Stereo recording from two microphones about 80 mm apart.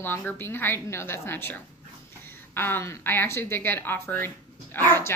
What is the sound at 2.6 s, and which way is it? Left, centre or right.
A woman's voice, left.